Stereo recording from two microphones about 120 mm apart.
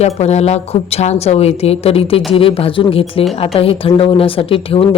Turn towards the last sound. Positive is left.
turn(degrees=50)  # may be behind; listen again after turning